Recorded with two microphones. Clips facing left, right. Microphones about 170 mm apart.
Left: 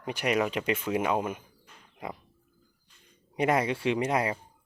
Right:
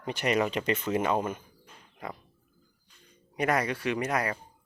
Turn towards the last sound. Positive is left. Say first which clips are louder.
# left 2 dB
turn(degrees=25)  # may be behind; listen again after turning